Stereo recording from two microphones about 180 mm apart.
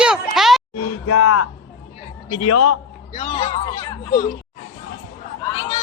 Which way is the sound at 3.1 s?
35° left (ahead or behind).